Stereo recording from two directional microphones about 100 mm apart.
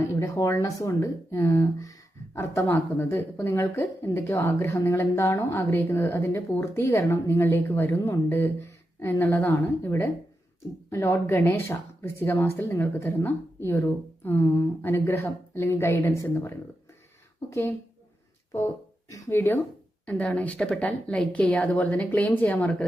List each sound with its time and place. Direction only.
0.0 s speech: 30° left (ahead or behind)
18.5 s speech: 30° left (ahead or behind)
20.1 s a woman's voice: 15° left (ahead or behind)